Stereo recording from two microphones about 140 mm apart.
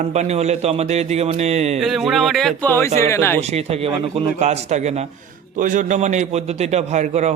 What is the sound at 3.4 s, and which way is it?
A man's voice, 50° right (ahead or behind).